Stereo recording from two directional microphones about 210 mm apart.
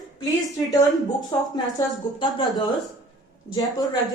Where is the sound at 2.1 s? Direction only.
25° left (ahead or behind).